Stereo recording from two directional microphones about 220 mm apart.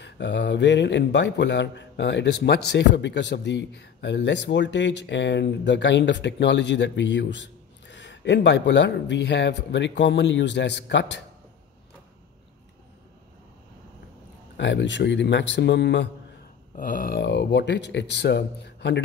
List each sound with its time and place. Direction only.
0.0 s speech: 55° left (ahead or behind)
14.6 s speech: 55° left (ahead or behind)
16.7 s speech: 40° left (ahead or behind)